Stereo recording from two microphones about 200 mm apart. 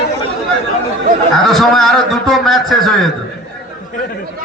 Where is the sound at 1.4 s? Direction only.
Centre (ahead or behind).